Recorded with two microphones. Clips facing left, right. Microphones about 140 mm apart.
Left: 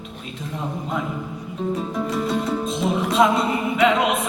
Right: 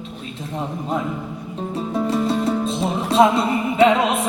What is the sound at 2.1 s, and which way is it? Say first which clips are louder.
Music: right 4 dB; 30° right (ahead or behind).